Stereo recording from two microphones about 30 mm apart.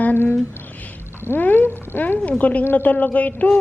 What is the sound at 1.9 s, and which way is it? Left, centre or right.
Speech, left.